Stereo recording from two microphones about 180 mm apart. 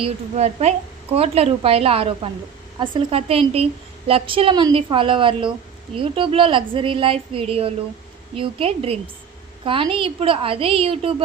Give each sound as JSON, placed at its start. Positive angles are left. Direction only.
{"t": 0.0, "sound": "a woman's voice", "side_deg": -35}